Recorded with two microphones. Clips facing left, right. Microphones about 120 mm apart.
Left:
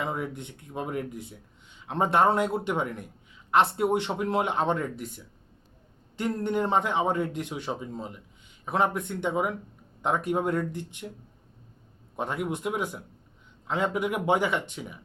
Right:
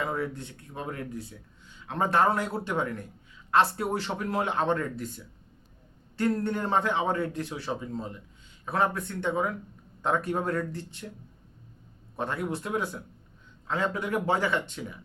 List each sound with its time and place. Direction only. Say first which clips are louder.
0.0 s speech: right 1 dB; 20° left (ahead or behind)
12.1 s speech: left 1 dB; 15° left (ahead or behind)